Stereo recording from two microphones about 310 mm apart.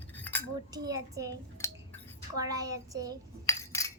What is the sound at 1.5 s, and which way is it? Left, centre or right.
Cutlery, centre.